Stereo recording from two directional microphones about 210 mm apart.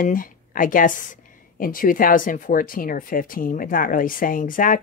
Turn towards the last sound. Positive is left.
turn(degrees=40)  # may be behind; listen again after turning